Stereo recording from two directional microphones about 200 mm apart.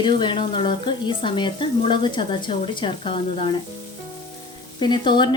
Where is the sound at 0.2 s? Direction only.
25° left (ahead or behind).